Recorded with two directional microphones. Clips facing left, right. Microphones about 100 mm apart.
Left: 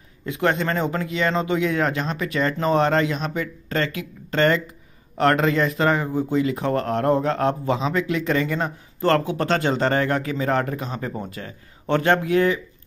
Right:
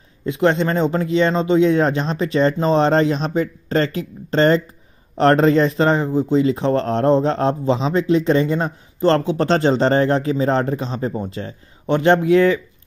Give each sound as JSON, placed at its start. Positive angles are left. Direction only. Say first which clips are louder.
{"t": 0.2, "sound": "a man's voice", "louder": "right 5 dB", "side_deg": -25}